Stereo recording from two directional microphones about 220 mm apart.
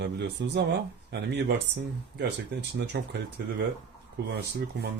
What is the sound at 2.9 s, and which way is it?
Speech, 50° right (ahead or behind).